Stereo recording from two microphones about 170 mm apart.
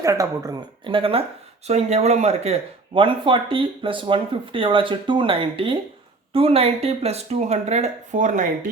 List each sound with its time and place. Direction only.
0.0 s speech: 20° right (ahead or behind); by 8.4 s 45° right (ahead or behind)